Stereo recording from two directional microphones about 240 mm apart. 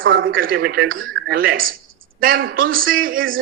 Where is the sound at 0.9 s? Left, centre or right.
Right.